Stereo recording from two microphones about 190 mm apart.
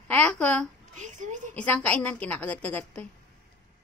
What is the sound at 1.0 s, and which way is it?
Speech, 40° right (ahead or behind).